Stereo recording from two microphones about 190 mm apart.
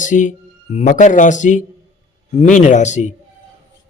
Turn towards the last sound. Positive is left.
turn(degrees=40)  # may be behind; listen again after turning